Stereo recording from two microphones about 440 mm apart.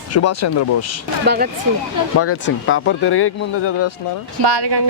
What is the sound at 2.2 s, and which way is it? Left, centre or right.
Speech, left.